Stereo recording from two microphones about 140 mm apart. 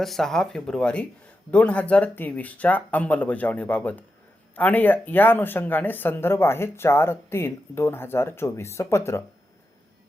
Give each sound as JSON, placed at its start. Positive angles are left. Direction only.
{"t": 0.0, "sound": "speech", "side_deg": 0}